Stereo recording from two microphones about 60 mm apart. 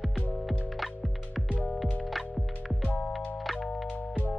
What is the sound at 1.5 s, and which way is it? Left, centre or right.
Music, left.